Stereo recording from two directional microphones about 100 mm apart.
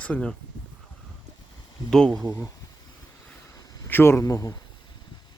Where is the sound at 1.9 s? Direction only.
5° left (ahead or behind).